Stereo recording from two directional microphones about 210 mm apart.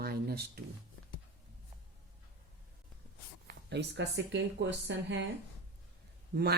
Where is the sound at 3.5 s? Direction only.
55° right (ahead or behind).